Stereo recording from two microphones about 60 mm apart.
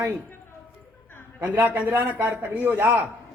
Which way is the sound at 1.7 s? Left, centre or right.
Right.